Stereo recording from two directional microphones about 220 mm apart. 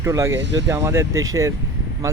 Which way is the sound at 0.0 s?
10° right (ahead or behind).